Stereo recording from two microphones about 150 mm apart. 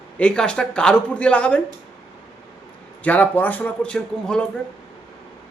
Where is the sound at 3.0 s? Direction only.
10° left (ahead or behind).